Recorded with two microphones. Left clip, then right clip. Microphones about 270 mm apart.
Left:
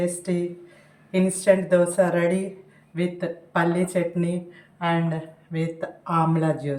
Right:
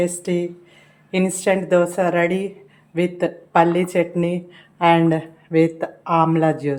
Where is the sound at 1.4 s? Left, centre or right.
Centre.